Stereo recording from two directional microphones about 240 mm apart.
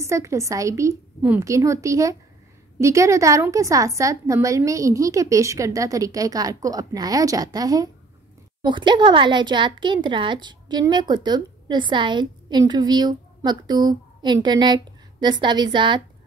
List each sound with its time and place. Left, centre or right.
0.0 s a woman's voice: centre